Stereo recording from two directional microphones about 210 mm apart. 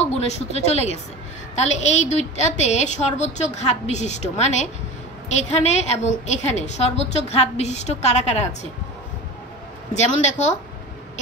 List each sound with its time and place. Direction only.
0.0 s a woman's voice: 30° left (ahead or behind)
9.9 s a woman's voice: 35° left (ahead or behind)